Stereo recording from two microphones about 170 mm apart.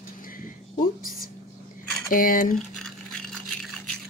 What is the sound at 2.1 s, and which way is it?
Speech, 55° left (ahead or behind).